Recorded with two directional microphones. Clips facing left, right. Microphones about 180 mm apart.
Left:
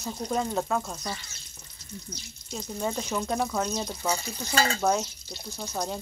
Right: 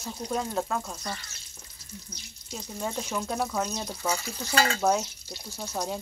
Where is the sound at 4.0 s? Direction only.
25° left (ahead or behind).